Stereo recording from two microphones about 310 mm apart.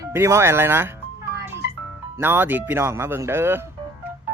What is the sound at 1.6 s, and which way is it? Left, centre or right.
Music, left.